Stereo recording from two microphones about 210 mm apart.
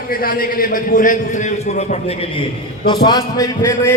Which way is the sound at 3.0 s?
20° left (ahead or behind).